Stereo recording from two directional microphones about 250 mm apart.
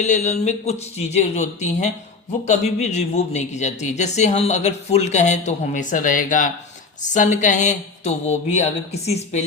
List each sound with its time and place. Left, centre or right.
0.0 s speech: left